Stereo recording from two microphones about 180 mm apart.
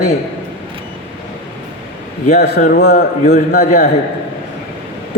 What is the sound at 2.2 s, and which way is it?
A man's voice, 55° left (ahead or behind).